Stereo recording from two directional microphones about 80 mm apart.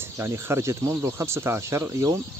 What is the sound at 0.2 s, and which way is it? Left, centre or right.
Speech, right.